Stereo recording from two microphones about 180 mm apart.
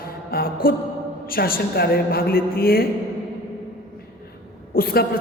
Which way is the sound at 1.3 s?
55° left (ahead or behind).